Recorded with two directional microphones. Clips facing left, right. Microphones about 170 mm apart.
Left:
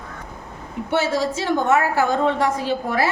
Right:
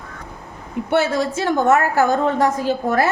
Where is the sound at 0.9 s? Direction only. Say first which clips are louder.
Right 2 dB; 55° right (ahead or behind).